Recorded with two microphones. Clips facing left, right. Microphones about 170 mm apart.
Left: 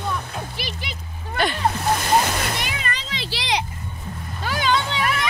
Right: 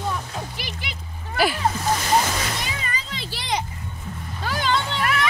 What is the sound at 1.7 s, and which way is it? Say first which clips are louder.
Splash: left 1 dB; 60° left (ahead or behind).